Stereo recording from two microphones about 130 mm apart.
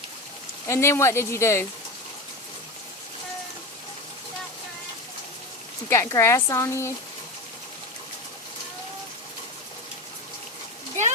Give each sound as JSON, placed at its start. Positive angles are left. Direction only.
{"t": 0.7, "sound": "speech", "side_deg": 20}
{"t": 5.9, "sound": "speech", "side_deg": 25}